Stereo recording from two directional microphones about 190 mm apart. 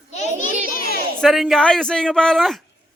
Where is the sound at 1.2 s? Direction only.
Centre (ahead or behind).